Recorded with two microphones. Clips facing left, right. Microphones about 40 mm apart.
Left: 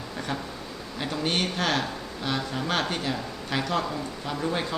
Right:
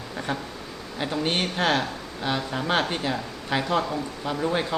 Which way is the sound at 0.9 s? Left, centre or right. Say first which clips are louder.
Right 2 dB; centre.